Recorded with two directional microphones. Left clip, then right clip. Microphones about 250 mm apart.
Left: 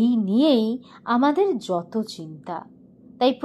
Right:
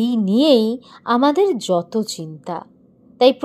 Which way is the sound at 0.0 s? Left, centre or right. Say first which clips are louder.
Right 3 dB; right.